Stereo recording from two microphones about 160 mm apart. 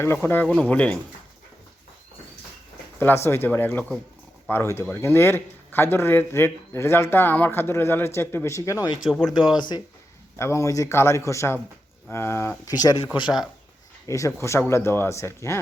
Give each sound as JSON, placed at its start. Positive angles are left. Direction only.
{"t": 0.0, "sound": "speech", "side_deg": 15}
{"t": 3.0, "sound": "speech", "side_deg": 15}
{"t": 9.0, "sound": "speech", "side_deg": 5}
{"t": 9.6, "sound": "speech", "side_deg": 30}
{"t": 10.3, "sound": "speech", "side_deg": 15}
{"t": 13.2, "sound": "speech", "side_deg": -5}
{"t": 14.1, "sound": "speech", "side_deg": 20}